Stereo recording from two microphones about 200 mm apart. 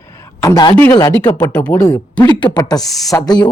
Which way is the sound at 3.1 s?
20° left (ahead or behind).